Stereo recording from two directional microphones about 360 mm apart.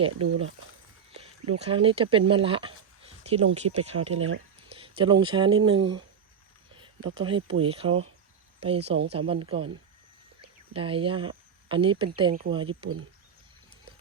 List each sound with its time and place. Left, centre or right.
1.1 s speech: centre
7.1 s speech: centre